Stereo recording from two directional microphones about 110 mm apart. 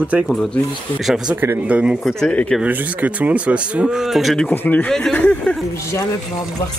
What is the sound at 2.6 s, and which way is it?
Speech, 15° right (ahead or behind).